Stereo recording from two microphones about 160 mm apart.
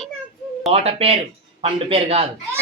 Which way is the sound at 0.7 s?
40° right (ahead or behind).